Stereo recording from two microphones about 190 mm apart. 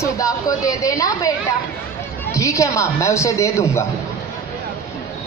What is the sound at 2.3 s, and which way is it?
A woman's voice, 15° left (ahead or behind).